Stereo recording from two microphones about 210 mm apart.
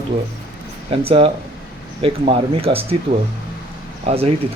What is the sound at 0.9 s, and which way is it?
Speech, 25° right (ahead or behind).